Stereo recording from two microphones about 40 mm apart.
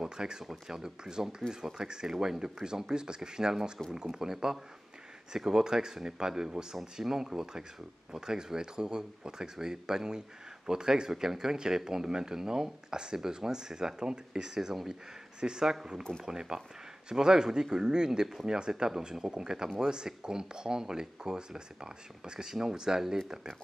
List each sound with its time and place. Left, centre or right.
0.0 s speech: centre